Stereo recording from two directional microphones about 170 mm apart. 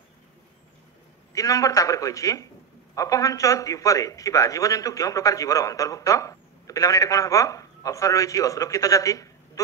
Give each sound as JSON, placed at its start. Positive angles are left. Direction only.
{"t": 1.3, "sound": "a man's voice", "side_deg": 20}